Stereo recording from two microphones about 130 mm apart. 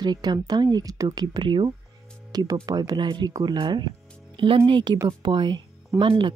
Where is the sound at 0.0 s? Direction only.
35° right (ahead or behind).